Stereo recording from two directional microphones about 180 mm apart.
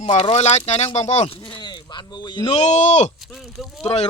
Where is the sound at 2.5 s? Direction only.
40° left (ahead or behind).